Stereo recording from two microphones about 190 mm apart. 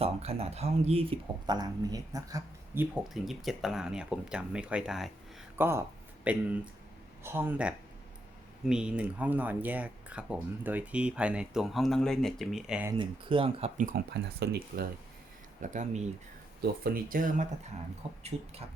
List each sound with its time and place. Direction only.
0.0 s speech: 30° right (ahead or behind)
1.5 s speech: 20° right (ahead or behind)
2.9 s speech: centre (ahead or behind)
5.5 s speech: 10° right (ahead or behind)
13.0 s speech: 25° right (ahead or behind)
13.7 s speech: 45° right (ahead or behind)
14.1 s speech: 60° right (ahead or behind)
15.6 s speech: 40° right (ahead or behind)